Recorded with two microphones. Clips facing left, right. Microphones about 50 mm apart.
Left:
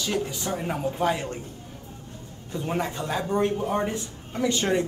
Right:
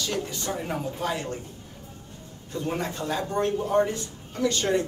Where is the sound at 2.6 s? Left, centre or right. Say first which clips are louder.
Left 1 dB; left.